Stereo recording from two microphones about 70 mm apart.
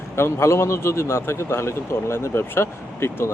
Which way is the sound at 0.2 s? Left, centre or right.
Left.